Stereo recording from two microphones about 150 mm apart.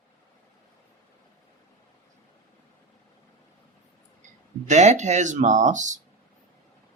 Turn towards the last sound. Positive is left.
turn(degrees=-55)  # may be behind; listen again after turning